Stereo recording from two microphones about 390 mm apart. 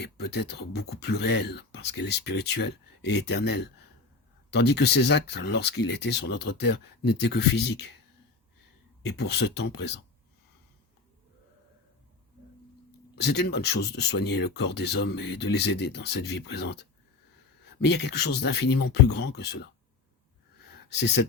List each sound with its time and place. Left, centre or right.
0.0 s speech: left
9.0 s speech: left
13.1 s speech: left